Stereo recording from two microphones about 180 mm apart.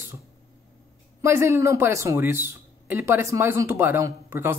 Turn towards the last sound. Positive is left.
turn(degrees=-15)  # may be behind; listen again after turning